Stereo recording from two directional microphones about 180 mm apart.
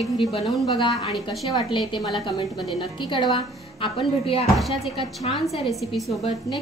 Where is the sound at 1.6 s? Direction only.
25° left (ahead or behind).